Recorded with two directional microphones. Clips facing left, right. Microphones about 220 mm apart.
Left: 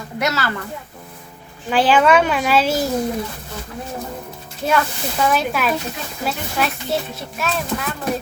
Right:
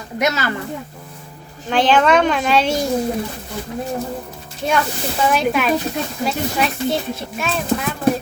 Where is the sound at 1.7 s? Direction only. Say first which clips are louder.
Even; 5° left (ahead or behind).